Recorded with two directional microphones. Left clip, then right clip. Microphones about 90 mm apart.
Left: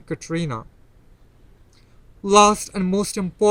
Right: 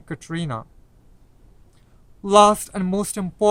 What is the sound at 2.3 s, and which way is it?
Speech, 45° right (ahead or behind).